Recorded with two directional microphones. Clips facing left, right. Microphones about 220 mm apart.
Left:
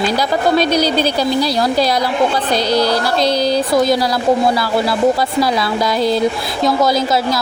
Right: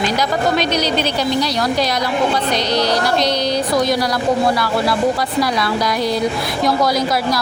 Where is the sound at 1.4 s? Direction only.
30° left (ahead or behind).